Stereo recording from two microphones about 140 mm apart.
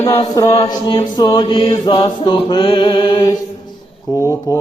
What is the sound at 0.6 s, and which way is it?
Chant, 30° left (ahead or behind).